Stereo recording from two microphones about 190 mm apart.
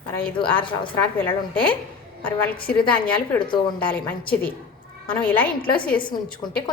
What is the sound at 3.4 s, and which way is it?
Speech, 25° left (ahead or behind).